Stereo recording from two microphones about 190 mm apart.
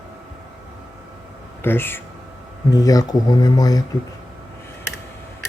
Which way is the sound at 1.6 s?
10° left (ahead or behind).